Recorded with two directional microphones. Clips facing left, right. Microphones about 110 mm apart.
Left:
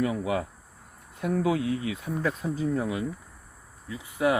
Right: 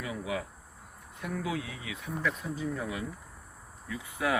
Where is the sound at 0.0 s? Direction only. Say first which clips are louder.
Left 8 dB; 50° left (ahead or behind).